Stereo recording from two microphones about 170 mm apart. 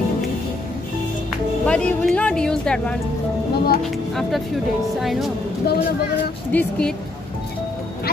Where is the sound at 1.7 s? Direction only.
5° left (ahead or behind).